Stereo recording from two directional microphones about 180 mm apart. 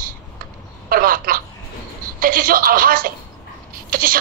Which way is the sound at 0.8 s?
55° right (ahead or behind).